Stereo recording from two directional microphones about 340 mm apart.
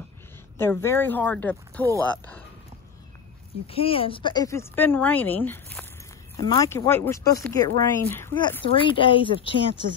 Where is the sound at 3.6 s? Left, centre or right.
Centre.